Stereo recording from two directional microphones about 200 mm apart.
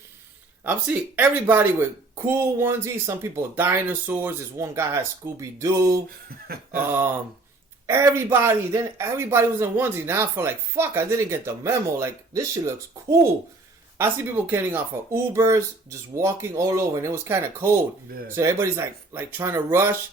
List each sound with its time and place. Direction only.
0.6 s speech: 10° right (ahead or behind)
6.5 s a sound: 50° right (ahead or behind)
7.9 s speech: 10° right (ahead or behind)